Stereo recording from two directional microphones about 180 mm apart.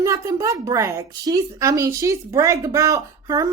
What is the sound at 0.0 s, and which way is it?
Speech, 15° right (ahead or behind).